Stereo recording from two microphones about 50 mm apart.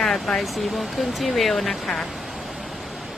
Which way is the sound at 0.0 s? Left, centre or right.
Centre.